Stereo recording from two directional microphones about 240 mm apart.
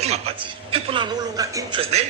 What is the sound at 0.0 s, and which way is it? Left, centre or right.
A man's voice, right.